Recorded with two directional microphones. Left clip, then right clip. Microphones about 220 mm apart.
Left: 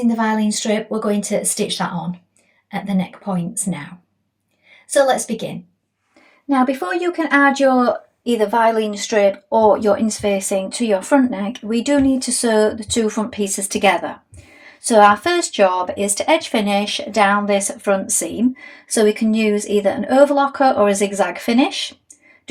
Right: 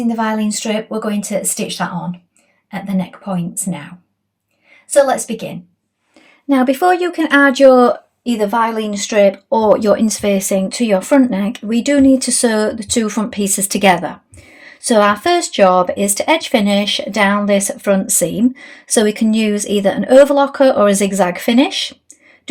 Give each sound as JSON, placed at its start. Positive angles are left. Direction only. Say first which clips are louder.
{"t": 0.1, "sound": "speech", "louder": "right 1 dB", "side_deg": -15}
{"t": 4.9, "sound": "speech", "louder": "right 3 dB", "side_deg": -15}
{"t": 6.5, "sound": "speech", "louder": "right 6 dB", "side_deg": -55}